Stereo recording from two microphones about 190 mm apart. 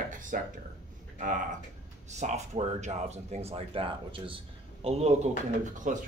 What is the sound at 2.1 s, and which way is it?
Speech, 35° right (ahead or behind).